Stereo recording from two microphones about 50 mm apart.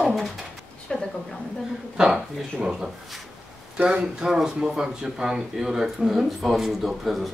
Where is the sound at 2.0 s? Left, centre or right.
Centre.